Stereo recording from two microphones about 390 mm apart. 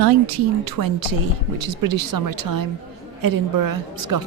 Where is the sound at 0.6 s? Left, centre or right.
Right.